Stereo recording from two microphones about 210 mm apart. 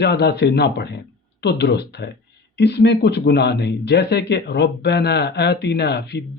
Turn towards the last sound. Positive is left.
turn(degrees=55)  # may be behind; listen again after turning